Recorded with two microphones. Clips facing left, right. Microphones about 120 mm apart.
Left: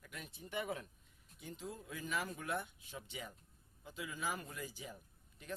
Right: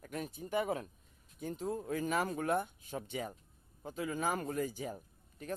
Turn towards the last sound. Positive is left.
turn(degrees=-45)  # may be behind; listen again after turning